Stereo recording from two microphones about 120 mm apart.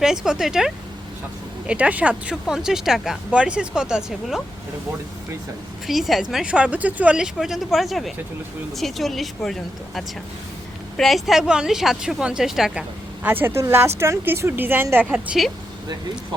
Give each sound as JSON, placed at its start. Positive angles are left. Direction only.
{"t": 0.0, "sound": "a woman's voice", "side_deg": -5}
{"t": 5.9, "sound": "a woman's voice", "side_deg": 0}
{"t": 13.2, "sound": "a woman's voice", "side_deg": -15}